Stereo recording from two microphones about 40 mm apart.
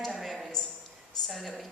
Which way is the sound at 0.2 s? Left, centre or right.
Centre.